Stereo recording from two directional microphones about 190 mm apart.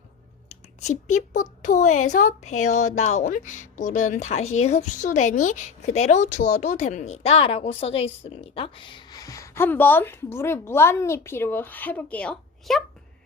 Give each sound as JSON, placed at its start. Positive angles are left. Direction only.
{"t": 0.4, "sound": "a woman's voice", "side_deg": 35}